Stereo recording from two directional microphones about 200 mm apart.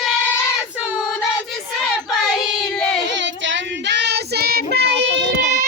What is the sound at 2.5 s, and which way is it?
Child singing, 5° left (ahead or behind).